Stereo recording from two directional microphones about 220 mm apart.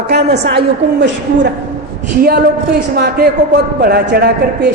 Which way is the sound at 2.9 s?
45° right (ahead or behind).